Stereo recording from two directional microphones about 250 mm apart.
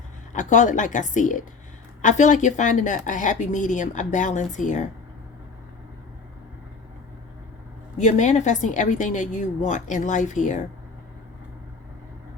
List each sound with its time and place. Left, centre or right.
0.3 s speech: left
7.9 s speech: left